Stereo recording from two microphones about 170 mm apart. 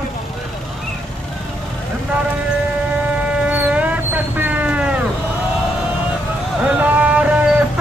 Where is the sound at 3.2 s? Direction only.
5° right (ahead or behind).